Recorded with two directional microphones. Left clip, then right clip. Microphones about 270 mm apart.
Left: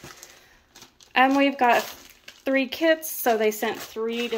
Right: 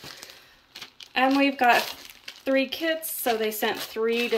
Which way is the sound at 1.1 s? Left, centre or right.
Centre.